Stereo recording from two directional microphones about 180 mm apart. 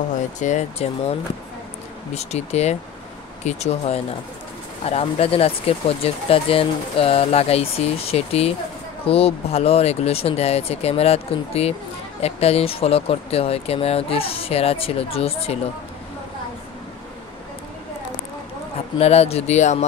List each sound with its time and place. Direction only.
0.4 s speech: 40° left (ahead or behind)
2.1 s speech: 35° left (ahead or behind)
18.9 s speech: 35° left (ahead or behind)